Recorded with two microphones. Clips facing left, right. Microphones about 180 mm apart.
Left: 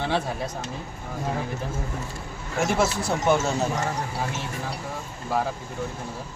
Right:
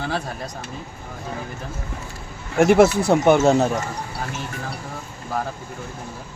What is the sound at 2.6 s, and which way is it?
Speech, 60° right (ahead or behind).